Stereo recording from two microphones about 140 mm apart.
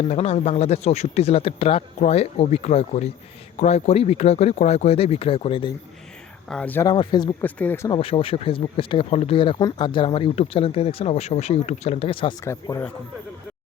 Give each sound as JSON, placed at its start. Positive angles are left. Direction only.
{"t": 0.0, "sound": "speech", "side_deg": 50}
{"t": 6.5, "sound": "speech", "side_deg": 10}
{"t": 6.8, "sound": "speech", "side_deg": 30}
{"t": 7.4, "sound": "speech", "side_deg": 10}
{"t": 7.9, "sound": "speech", "side_deg": 40}
{"t": 9.0, "sound": "speech", "side_deg": 50}
{"t": 12.4, "sound": "speech", "side_deg": 25}